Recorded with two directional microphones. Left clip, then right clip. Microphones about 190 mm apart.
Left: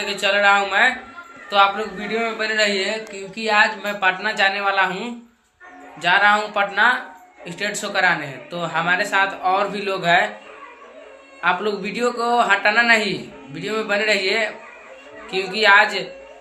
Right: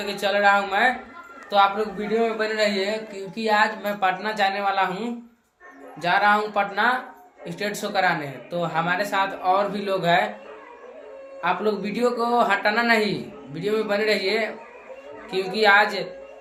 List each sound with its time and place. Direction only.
0.0 s speech: 15° right (ahead or behind)
11.3 s speech: 15° right (ahead or behind)
15.5 s speech: 15° right (ahead or behind)